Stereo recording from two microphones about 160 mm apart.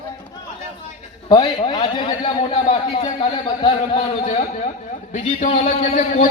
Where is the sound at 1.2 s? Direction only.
25° left (ahead or behind).